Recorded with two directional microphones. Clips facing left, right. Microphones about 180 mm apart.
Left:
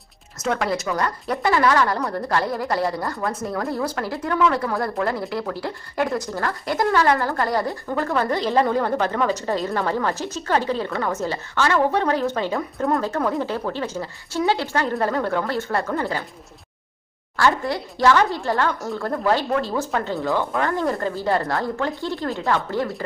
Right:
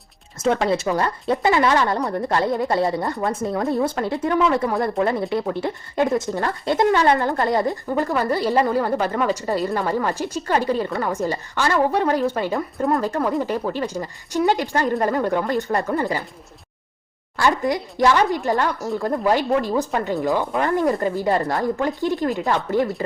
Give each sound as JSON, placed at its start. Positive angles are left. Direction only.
{"t": 0.3, "sound": "speech", "side_deg": -25}
{"t": 13.0, "sound": "speech", "side_deg": -10}
{"t": 17.3, "sound": "speech", "side_deg": -15}